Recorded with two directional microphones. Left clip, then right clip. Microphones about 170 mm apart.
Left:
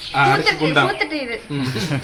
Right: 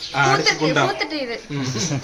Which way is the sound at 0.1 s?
30° left (ahead or behind).